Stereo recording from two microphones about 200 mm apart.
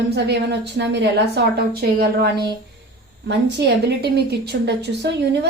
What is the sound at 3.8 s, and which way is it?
A woman's voice, 55° right (ahead or behind).